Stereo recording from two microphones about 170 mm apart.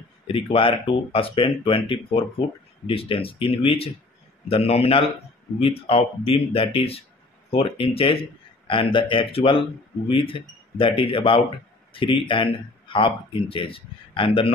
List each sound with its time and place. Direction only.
0.3 s speech: 30° left (ahead or behind)